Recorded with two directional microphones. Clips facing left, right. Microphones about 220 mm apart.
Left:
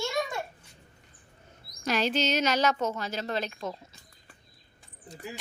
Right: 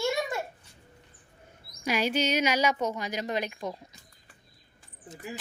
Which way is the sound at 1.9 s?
10° right (ahead or behind).